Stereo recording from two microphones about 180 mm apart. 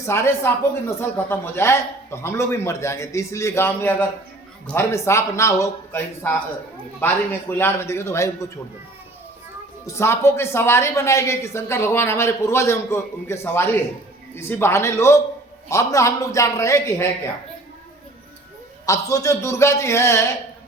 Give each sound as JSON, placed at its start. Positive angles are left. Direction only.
{"t": 0.0, "sound": "a woman's voice", "side_deg": 15}
{"t": 9.8, "sound": "a woman's voice", "side_deg": 15}
{"t": 18.9, "sound": "a woman's voice", "side_deg": 15}